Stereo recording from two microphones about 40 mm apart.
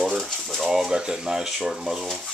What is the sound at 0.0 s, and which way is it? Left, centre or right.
Typewriter, centre.